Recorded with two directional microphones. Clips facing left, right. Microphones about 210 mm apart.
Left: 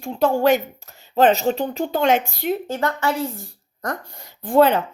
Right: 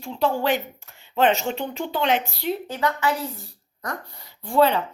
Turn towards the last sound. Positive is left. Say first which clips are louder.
# left 4 dB
turn(degrees=45)  # may be behind; listen again after turning